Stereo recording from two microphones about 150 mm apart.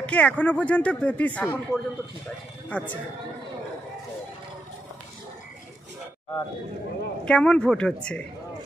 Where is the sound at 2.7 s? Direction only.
10° left (ahead or behind).